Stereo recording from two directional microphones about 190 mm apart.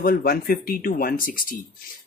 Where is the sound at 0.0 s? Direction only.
50° left (ahead or behind).